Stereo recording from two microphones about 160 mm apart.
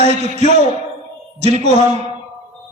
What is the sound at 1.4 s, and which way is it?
Speech, 45° right (ahead or behind).